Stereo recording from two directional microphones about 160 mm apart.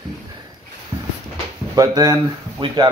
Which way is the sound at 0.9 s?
25° right (ahead or behind).